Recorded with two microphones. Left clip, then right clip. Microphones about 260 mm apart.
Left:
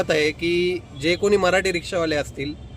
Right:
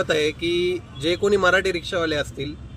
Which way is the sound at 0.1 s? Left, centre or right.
Right.